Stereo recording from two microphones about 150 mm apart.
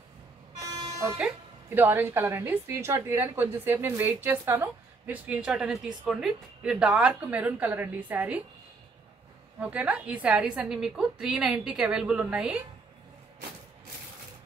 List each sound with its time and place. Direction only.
0.7 s vehicle: 20° right (ahead or behind)
1.1 s a woman's voice: 10° right (ahead or behind)
9.6 s a woman's voice: 10° right (ahead or behind)